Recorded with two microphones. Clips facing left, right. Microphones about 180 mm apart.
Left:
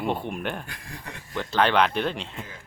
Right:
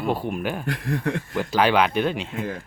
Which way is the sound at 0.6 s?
70° right (ahead or behind).